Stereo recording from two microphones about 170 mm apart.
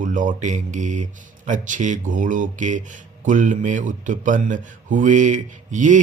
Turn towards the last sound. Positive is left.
turn(degrees=-45)  # may be behind; listen again after turning